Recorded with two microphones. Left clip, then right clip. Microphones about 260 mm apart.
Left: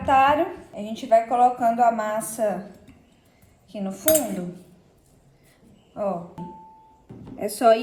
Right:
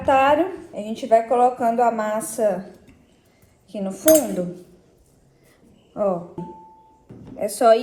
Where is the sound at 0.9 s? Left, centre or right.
Centre.